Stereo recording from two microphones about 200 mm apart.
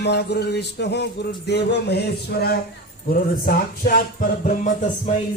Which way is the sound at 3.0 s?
45° left (ahead or behind).